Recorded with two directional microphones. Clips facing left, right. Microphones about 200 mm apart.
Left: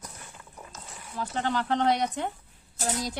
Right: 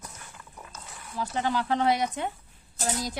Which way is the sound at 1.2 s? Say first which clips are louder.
Right 1 dB; 10° right (ahead or behind).